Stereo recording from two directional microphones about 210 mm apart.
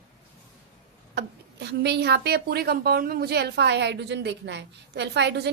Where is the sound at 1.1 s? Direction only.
55° right (ahead or behind).